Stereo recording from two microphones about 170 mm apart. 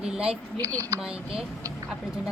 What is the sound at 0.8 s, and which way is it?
Speech, 20° right (ahead or behind).